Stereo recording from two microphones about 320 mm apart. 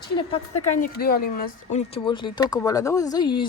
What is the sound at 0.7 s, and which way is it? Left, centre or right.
Speech, left.